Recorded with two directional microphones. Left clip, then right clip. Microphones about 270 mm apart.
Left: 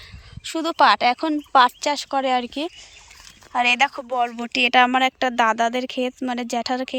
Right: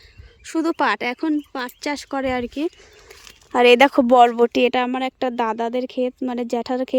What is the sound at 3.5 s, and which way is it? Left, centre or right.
Speech, right.